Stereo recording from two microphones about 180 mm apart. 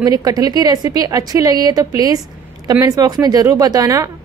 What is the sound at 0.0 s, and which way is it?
A woman's voice, 20° right (ahead or behind).